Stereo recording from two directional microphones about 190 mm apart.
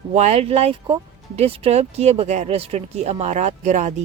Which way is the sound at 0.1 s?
35° right (ahead or behind).